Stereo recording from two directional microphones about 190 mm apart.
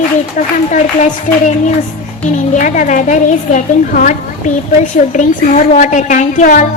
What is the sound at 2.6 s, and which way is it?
Speech, 40° left (ahead or behind).